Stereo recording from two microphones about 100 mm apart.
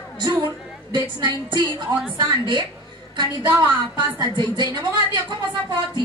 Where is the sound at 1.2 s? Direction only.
50° right (ahead or behind).